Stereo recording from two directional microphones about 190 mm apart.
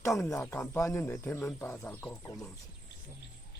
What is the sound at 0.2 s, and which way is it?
A man's voice, 15° left (ahead or behind).